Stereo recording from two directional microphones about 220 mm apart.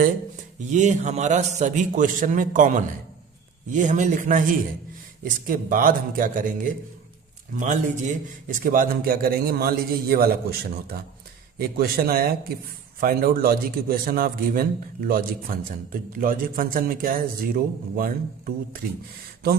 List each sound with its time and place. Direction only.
0.7 s a man's voice: 35° right (ahead or behind)